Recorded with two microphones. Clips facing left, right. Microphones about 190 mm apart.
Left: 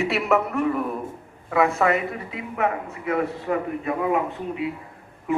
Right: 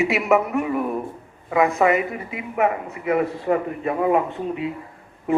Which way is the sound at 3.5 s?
25° right (ahead or behind).